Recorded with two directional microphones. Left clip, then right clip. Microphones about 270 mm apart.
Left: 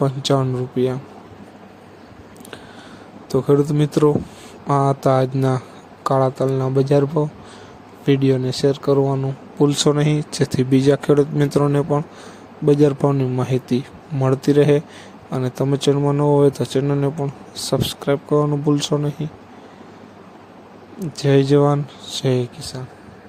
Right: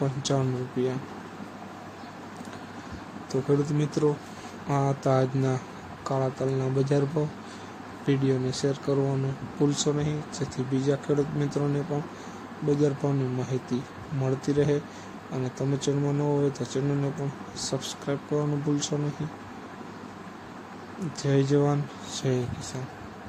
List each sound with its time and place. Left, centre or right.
0.0 s speech: left
3.3 s speech: left
21.2 s speech: left